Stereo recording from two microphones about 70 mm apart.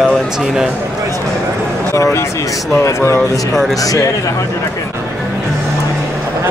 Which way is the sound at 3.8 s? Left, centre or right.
Left.